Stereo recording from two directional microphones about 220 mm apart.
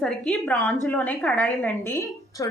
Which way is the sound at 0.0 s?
5° left (ahead or behind).